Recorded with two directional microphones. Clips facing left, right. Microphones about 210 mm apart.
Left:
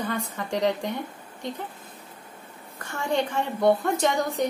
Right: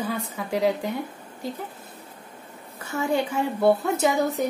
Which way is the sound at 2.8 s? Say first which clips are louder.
Right 2 dB; 5° right (ahead or behind).